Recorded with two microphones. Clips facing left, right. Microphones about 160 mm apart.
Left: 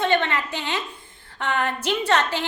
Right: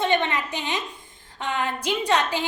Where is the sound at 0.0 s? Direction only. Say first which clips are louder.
Left 1 dB; 15° right (ahead or behind).